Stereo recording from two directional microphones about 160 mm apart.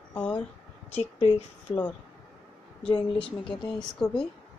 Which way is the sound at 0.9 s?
40° left (ahead or behind).